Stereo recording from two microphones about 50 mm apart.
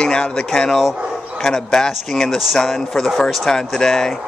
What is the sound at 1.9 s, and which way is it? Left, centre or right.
Speech, centre.